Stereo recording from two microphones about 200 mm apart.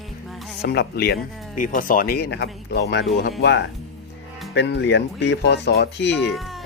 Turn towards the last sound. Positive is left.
turn(degrees=0)  # may be behind; listen again after turning